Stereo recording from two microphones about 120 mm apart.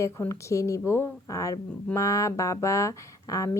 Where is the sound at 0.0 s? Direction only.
25° left (ahead or behind).